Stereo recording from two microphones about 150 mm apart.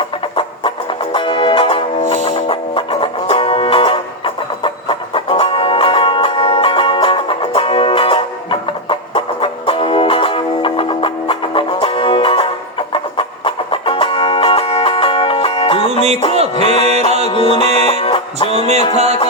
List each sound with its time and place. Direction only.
1.1 s music: 35° left (ahead or behind)
16.6 s music: 45° right (ahead or behind)
17.3 s music: 35° left (ahead or behind)
18.4 s music: 45° right (ahead or behind)